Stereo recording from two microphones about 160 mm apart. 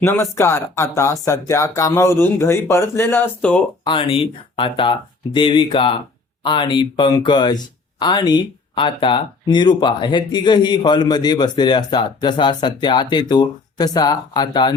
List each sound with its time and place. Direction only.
0.0 s speech: 15° left (ahead or behind)
3.8 s speech: 30° left (ahead or behind)